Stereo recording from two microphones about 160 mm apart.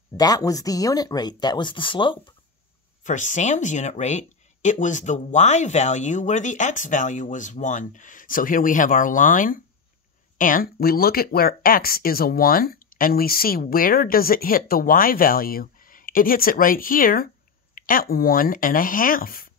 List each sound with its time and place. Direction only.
0.1 s speech: 25° left (ahead or behind)
3.0 s speech: 50° left (ahead or behind)